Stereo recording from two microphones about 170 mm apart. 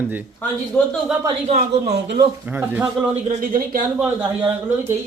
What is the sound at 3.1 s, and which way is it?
Speech, 50° right (ahead or behind).